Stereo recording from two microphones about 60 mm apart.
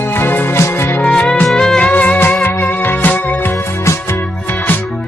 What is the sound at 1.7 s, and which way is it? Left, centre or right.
Music, left.